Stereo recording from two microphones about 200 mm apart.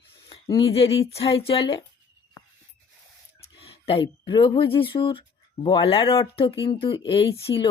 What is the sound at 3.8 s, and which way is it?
Speech, 25° left (ahead or behind).